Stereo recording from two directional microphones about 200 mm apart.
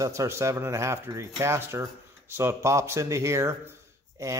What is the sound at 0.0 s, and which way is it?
Speech, 15° right (ahead or behind).